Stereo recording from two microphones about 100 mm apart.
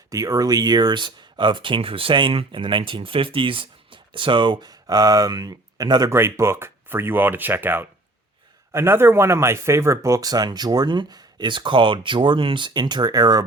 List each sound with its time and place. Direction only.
0.1 s speech: 35° right (ahead or behind)
6.1 s speech: 25° right (ahead or behind); by 13.4 s 40° right (ahead or behind)